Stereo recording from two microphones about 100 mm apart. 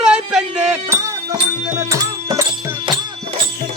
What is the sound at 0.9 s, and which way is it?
Music, 30° right (ahead or behind).